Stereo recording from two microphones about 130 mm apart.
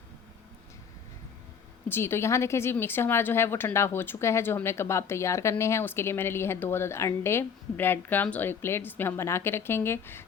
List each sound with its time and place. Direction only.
1.9 s a woman's voice: 20° left (ahead or behind)